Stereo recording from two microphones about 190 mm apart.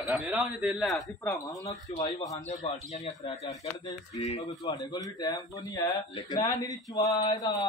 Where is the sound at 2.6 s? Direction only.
35° left (ahead or behind).